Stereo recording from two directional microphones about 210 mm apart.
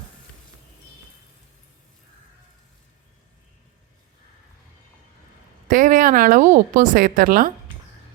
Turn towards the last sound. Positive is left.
turn(degrees=-40)  # may be behind; listen again after turning